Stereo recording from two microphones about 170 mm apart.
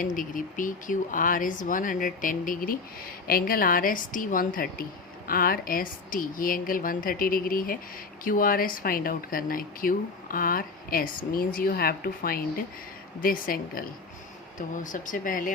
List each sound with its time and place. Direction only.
0.0 s speech: 50° left (ahead or behind)